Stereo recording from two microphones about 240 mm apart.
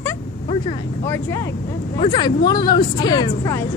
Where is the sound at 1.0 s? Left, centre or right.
Centre.